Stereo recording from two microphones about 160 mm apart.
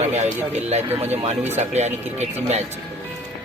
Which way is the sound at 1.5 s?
45° right (ahead or behind).